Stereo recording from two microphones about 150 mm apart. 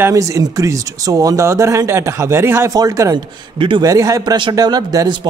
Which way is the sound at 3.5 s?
35° right (ahead or behind).